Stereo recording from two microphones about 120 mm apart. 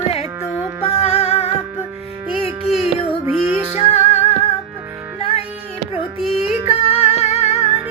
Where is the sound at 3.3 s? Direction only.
15° right (ahead or behind).